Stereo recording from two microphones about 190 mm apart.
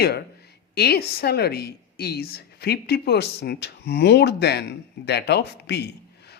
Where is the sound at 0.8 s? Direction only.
55° left (ahead or behind).